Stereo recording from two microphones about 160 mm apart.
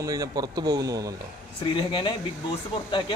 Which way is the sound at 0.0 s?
25° right (ahead or behind).